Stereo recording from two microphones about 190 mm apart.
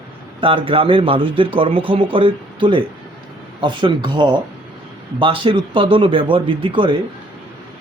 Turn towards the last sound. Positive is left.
turn(degrees=-25)  # may be behind; listen again after turning